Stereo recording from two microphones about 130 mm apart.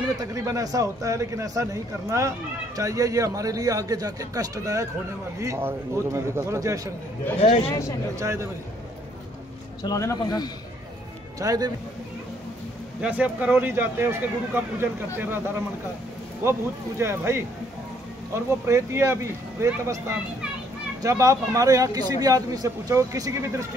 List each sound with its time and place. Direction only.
0.2 s speech: 25° right (ahead or behind)
7.3 s speech: 50° left (ahead or behind)
8.2 s speech: 20° right (ahead or behind)
9.8 s a man's voice: 25° left (ahead or behind)
11.3 s speech: 30° right (ahead or behind)
13.0 s speech: 10° right (ahead or behind)
17.0 s speech: 20° right (ahead or behind)
18.7 s speech: 20° right (ahead or behind)